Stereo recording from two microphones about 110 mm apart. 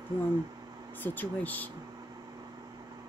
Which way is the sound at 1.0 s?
15° left (ahead or behind).